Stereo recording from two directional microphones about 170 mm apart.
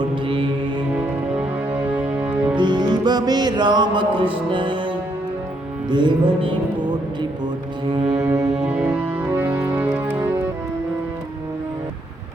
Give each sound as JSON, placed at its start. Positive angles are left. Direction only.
{"t": 1.9, "sound": "music", "side_deg": -10}
{"t": 2.6, "sound": "music", "side_deg": -25}
{"t": 5.9, "sound": "music", "side_deg": -25}
{"t": 8.0, "sound": "music", "side_deg": -40}
{"t": 8.5, "sound": "music", "side_deg": -5}